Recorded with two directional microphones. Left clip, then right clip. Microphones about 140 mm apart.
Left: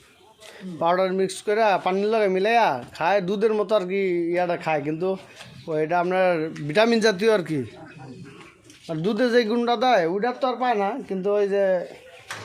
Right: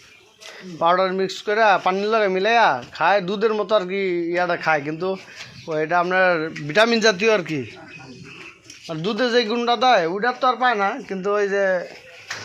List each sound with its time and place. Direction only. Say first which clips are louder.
0.8 s speech: right 3 dB; 20° left (ahead or behind)
9.0 s speech: right 1 dB; 40° left (ahead or behind)